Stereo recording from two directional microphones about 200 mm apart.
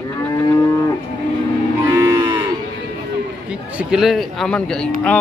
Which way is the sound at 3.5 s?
5° right (ahead or behind).